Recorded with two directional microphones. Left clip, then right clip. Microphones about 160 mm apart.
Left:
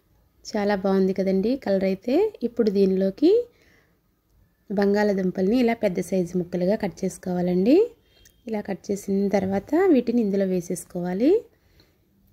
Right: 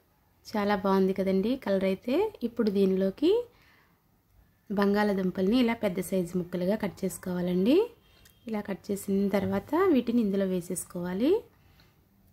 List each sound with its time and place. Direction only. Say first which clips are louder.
0.5 s a woman's voice: left 4 dB; 20° left (ahead or behind)
4.6 s a woman's voice: left 5 dB; 20° left (ahead or behind)